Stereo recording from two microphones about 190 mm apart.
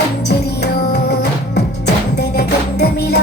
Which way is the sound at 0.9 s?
60° left (ahead or behind).